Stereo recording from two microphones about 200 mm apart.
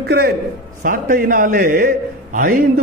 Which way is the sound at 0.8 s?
40° right (ahead or behind).